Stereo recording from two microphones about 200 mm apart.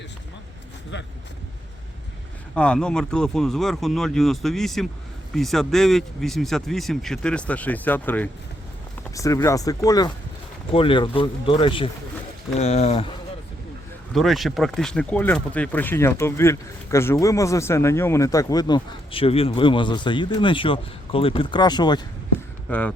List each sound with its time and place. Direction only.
2.6 s speech: 5° left (ahead or behind); by 13.1 s 30° left (ahead or behind)
14.1 s speech: centre (ahead or behind); by 22.0 s 20° left (ahead or behind)
22.7 s speech: 5° left (ahead or behind)